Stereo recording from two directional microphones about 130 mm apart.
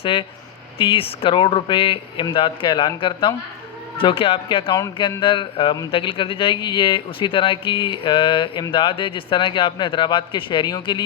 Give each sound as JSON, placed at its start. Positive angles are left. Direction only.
{"t": 0.0, "sound": "speech", "side_deg": 40}